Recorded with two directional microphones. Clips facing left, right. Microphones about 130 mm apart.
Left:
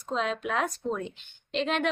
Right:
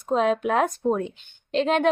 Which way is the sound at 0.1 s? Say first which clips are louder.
Right 8 dB; 50° right (ahead or behind).